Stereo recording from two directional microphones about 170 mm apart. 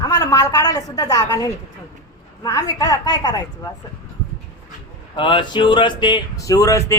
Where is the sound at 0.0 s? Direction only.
20° left (ahead or behind).